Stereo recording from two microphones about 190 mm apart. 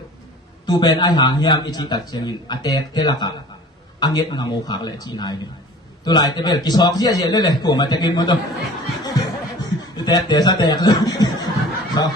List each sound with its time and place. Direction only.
0.6 s a man's voice: 25° left (ahead or behind)
9.0 s chuckle: 20° left (ahead or behind)
12.0 s snicker: 20° left (ahead or behind)